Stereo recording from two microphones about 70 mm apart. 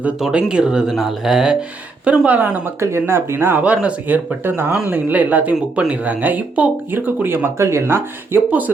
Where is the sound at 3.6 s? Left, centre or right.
Centre.